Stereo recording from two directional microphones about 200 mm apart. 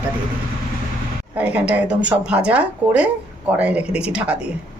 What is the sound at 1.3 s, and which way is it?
Speech, 5° right (ahead or behind).